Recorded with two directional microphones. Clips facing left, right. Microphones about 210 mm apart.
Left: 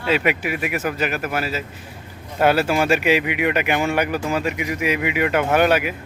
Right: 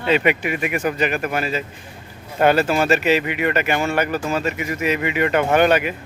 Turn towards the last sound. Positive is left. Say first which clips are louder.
# right 1 dB
turn(degrees=5)  # may be behind; listen again after turning